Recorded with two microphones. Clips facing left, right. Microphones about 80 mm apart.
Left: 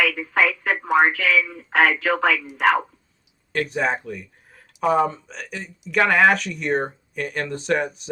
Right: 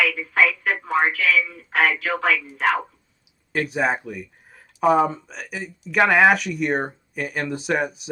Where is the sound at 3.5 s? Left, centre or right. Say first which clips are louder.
Right 1 dB; centre.